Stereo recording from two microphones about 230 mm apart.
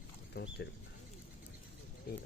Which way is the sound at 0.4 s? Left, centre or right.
Left.